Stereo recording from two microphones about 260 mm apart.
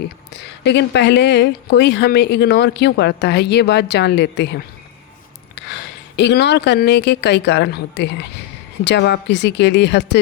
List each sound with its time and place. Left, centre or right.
0.3 s speech: left